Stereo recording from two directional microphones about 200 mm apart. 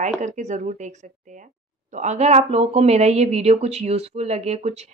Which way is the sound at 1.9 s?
35° right (ahead or behind).